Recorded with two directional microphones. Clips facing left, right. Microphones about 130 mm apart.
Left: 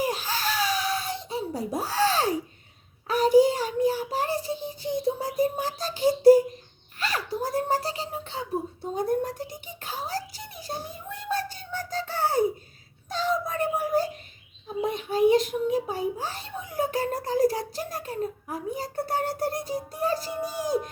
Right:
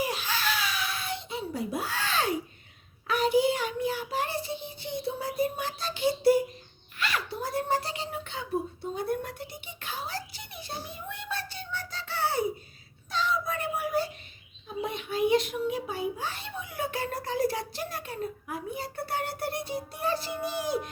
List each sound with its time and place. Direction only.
0.0 s a sound: 40° left (ahead or behind)
3.1 s child singing: 40° left (ahead or behind)
7.0 s beatboxing: 40° left (ahead or behind)
13.1 s child singing: 45° left (ahead or behind)
14.8 s a child's voice: 40° left (ahead or behind)